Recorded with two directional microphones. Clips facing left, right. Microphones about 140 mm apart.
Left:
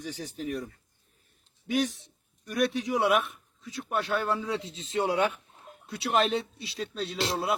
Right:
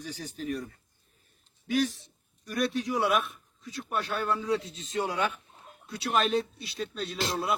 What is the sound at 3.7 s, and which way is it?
A man's voice, 20° left (ahead or behind).